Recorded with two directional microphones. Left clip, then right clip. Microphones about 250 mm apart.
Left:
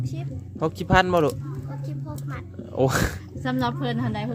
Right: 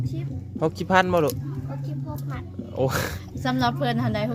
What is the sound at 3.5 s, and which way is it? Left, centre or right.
Speech, right.